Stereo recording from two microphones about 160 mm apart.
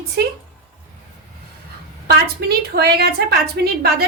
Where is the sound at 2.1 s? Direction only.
85° right.